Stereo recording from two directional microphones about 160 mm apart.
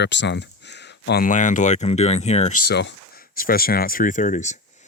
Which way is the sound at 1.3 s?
50° left (ahead or behind).